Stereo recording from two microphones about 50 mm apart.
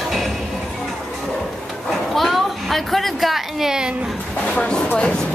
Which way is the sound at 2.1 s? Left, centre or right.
Centre.